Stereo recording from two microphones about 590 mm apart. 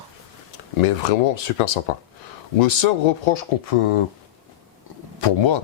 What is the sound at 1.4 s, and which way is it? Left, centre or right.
Speech, left.